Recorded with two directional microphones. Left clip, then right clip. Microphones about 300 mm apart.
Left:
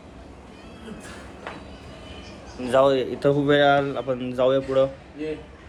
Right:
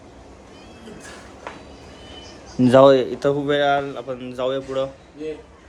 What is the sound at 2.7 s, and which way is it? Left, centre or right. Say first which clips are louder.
Speech: right 6 dB; right.